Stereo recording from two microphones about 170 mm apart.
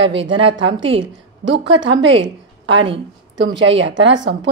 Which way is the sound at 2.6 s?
90° right.